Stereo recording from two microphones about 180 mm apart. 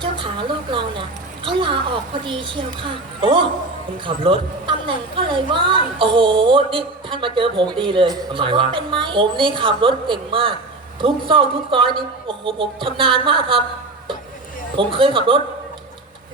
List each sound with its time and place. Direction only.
0.0 s a woman's voice: 25° right (ahead or behind)
14.8 s a woman's voice: 30° right (ahead or behind)